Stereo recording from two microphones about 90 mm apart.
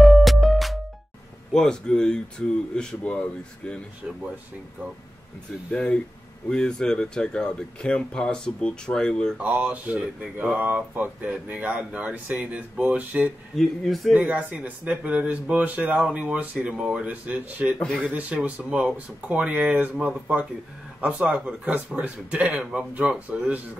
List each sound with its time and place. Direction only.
0.0 s music: centre (ahead or behind)
1.5 s speech: 10° left (ahead or behind)
5.7 s speech: 10° left (ahead or behind)
9.4 s speech: 15° right (ahead or behind)
13.6 s speech: centre (ahead or behind)
14.1 s speech: 15° right (ahead or behind)